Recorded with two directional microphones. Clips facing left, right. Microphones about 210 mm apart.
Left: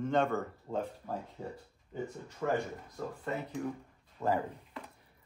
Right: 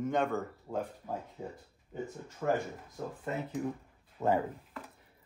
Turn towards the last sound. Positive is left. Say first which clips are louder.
# right 2 dB
turn(degrees=-15)  # may be behind; listen again after turning